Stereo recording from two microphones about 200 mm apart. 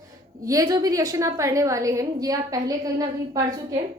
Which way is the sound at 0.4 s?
15° right (ahead or behind).